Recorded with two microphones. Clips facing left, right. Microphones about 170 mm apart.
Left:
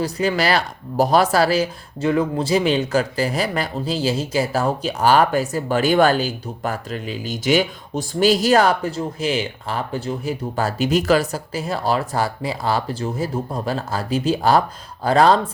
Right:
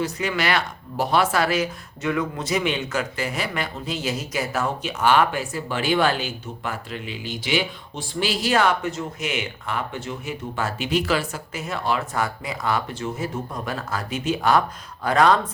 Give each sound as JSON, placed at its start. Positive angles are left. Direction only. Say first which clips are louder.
{"t": 0.0, "sound": "speech", "louder": "left 5 dB", "side_deg": 35}